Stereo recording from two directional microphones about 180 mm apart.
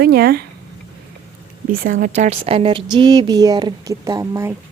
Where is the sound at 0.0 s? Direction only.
60° right (ahead or behind).